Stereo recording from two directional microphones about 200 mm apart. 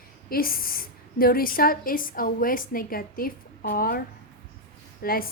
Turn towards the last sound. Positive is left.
turn(degrees=45)  # may be behind; listen again after turning